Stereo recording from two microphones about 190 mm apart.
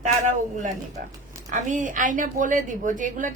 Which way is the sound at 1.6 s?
45° right (ahead or behind).